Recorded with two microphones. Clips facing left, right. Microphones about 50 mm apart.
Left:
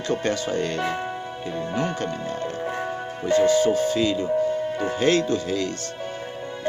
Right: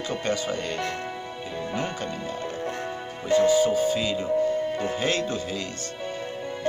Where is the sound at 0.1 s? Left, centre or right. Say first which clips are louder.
Left 4 dB; centre.